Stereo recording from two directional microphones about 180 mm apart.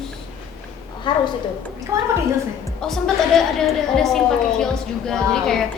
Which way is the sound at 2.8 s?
Centre (ahead or behind).